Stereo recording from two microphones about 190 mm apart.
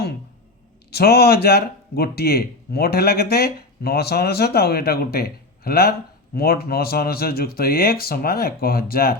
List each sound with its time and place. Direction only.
0.9 s speech: 55° left (ahead or behind)